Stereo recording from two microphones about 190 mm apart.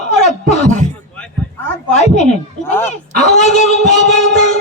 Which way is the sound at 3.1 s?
40° left (ahead or behind).